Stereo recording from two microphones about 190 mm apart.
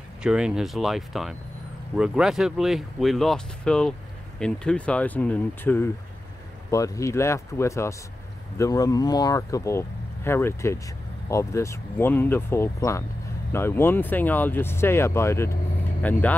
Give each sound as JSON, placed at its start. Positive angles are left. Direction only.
{"t": 0.2, "sound": "speech", "side_deg": -5}